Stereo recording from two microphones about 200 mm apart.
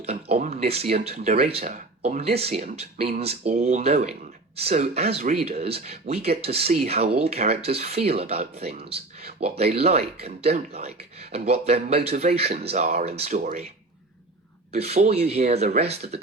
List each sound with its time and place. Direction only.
0.0 s speech: 30° right (ahead or behind)
14.7 s speech: 30° right (ahead or behind)